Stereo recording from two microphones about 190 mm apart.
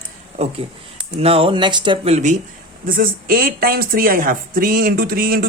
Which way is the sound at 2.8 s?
45° right (ahead or behind).